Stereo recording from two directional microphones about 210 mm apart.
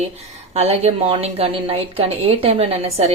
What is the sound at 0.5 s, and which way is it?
A woman's voice, 30° right (ahead or behind).